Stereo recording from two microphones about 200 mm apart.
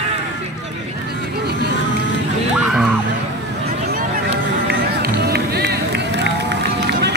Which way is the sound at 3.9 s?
40° right (ahead or behind).